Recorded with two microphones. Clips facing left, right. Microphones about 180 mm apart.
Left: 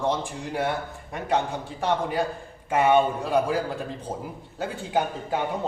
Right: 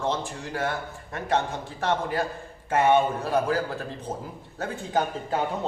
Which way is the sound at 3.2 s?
15° left (ahead or behind).